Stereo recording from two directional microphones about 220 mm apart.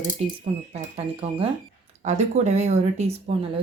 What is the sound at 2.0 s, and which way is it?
Speech, 30° right (ahead or behind).